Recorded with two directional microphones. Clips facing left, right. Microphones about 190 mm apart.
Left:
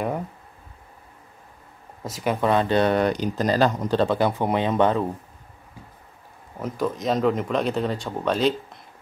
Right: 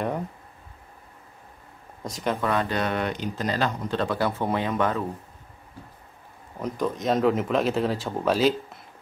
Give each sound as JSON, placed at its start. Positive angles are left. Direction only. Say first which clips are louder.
{"t": 2.0, "sound": "speech", "louder": "left 2 dB", "side_deg": 5}
{"t": 2.4, "sound": "speech", "louder": "left 8 dB", "side_deg": 25}
{"t": 4.1, "sound": "speech", "louder": "left 4 dB", "side_deg": 20}
{"t": 6.6, "sound": "speech", "louder": "left 1 dB", "side_deg": 0}